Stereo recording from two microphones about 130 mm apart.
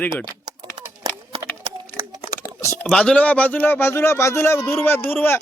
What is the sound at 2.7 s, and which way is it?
Speech, 10° left (ahead or behind).